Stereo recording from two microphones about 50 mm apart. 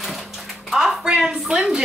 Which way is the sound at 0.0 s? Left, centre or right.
Centre.